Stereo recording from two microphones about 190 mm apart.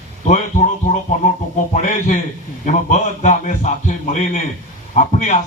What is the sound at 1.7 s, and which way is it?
A man's voice, 40° left (ahead or behind).